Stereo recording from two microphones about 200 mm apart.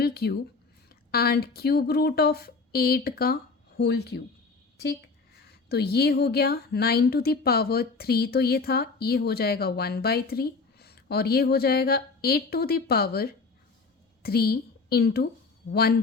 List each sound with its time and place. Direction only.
0.0 s speech: 50° left (ahead or behind)
5.5 s a woman's voice: 55° left (ahead or behind)